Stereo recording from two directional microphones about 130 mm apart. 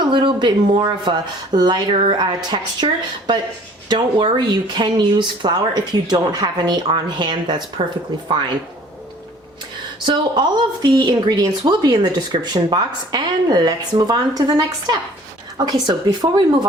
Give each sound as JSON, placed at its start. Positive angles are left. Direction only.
{"t": 0.0, "sound": "a woman's voice", "side_deg": -35}
{"t": 10.1, "sound": "a woman's voice", "side_deg": -35}